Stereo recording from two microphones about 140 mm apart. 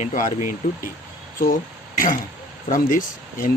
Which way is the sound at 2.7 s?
75° left (ahead or behind).